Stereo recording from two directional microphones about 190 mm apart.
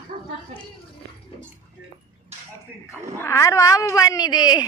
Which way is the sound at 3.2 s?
15° left (ahead or behind).